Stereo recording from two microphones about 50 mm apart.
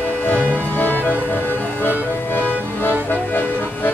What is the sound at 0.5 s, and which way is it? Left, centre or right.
Music, left.